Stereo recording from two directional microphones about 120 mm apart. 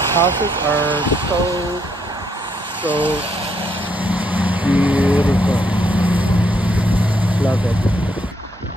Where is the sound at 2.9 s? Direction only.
50° right (ahead or behind).